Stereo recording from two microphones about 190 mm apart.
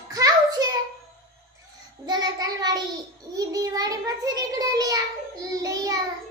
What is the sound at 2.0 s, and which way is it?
A child's voice, 20° right (ahead or behind).